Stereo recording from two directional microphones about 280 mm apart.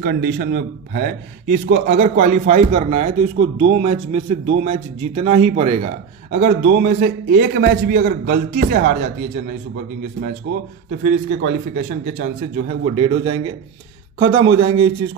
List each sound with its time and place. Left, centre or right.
0.0 s a man's voice: right
10.9 s a man's voice: right
14.5 s a man's voice: centre